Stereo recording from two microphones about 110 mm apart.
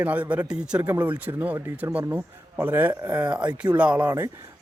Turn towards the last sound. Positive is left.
turn(degrees=-10)  # may be behind; listen again after turning